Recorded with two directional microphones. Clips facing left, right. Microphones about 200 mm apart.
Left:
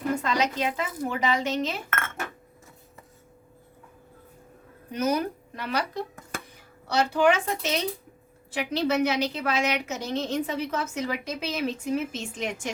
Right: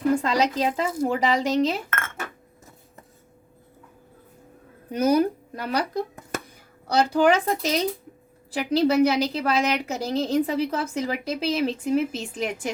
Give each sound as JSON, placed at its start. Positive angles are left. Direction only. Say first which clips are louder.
{"t": 0.2, "sound": "a woman's voice", "louder": "right 4 dB", "side_deg": -35}
{"t": 4.9, "sound": "a woman's voice", "louder": "right 6 dB", "side_deg": -35}